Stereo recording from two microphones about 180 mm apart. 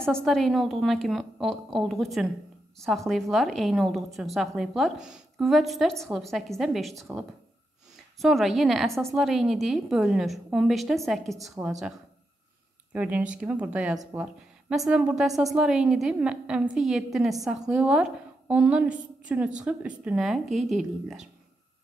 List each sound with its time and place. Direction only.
0.0 s a woman's voice: 5° left (ahead or behind)
12.9 s a woman's voice: 10° right (ahead or behind)